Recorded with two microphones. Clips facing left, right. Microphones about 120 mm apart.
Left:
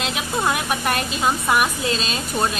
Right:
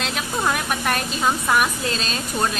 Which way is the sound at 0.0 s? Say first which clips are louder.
Left 1 dB; 5° left (ahead or behind).